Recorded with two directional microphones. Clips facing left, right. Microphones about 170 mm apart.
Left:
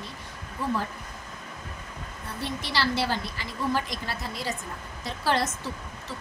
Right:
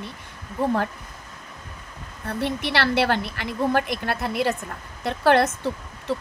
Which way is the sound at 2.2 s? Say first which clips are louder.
Right 8 dB; 60° right (ahead or behind).